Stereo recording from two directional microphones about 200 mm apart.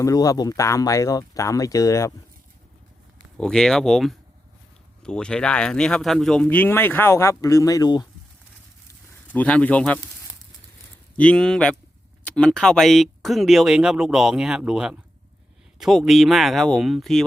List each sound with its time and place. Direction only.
0.0 s speech: 15° left (ahead or behind)
3.3 s speech: 5° left (ahead or behind); by 8.0 s 20° left (ahead or behind)
9.3 s speech: 5° left (ahead or behind)
11.2 s speech: 5° left (ahead or behind)